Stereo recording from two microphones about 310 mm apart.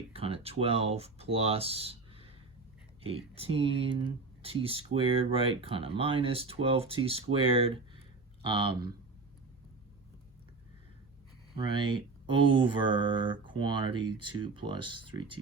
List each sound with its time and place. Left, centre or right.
0.1 s speech: centre
11.5 s speech: centre